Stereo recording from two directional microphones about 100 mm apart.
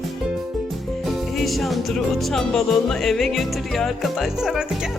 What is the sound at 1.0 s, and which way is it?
Music, centre (ahead or behind).